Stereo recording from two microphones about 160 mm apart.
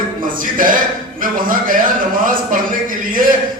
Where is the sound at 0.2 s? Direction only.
60° right (ahead or behind).